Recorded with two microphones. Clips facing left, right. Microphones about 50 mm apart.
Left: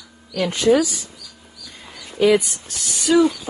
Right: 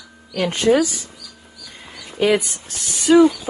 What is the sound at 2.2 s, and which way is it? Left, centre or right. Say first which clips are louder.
Speech: left 2 dB; right.